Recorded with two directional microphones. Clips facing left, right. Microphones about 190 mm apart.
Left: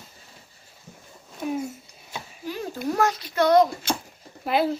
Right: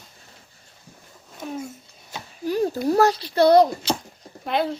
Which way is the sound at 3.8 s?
50° left (ahead or behind).